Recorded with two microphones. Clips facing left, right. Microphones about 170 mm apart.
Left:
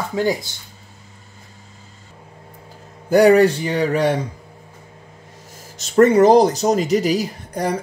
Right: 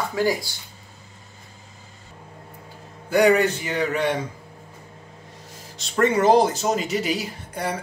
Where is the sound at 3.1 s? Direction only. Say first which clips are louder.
Left 6 dB; 40° left (ahead or behind).